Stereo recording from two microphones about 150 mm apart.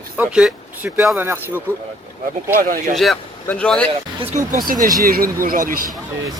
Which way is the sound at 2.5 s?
70° right (ahead or behind).